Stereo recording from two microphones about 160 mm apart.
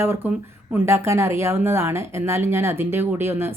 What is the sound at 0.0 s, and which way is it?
Speech, 15° right (ahead or behind).